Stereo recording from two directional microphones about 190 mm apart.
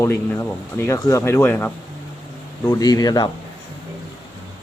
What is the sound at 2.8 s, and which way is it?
Speech, 20° left (ahead or behind).